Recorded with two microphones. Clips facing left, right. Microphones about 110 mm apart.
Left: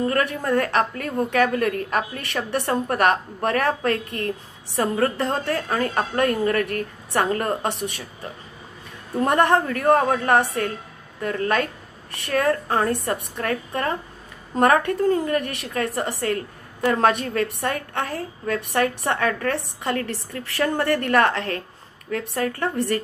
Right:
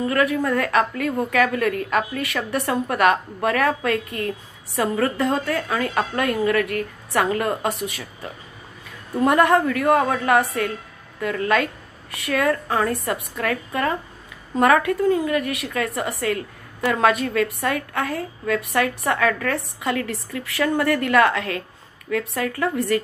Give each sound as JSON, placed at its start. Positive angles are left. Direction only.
{"t": 0.0, "sound": "a woman's voice", "side_deg": 40}
{"t": 9.2, "sound": "a woman's voice", "side_deg": 35}